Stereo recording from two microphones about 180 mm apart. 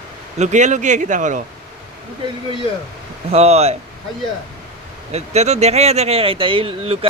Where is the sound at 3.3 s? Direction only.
35° right (ahead or behind).